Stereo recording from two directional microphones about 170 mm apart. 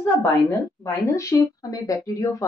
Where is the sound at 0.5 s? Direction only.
20° left (ahead or behind).